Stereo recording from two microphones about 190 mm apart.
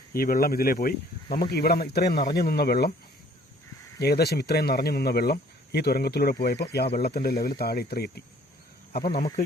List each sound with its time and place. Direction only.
0.1 s speech: 50° left (ahead or behind)
4.0 s speech: 55° left (ahead or behind)